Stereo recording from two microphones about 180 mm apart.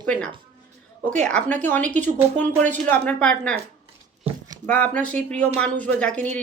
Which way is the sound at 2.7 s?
10° left (ahead or behind).